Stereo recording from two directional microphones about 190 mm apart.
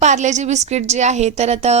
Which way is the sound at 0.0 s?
40° right (ahead or behind).